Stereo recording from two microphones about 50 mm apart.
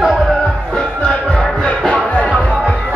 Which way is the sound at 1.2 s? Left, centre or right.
Centre.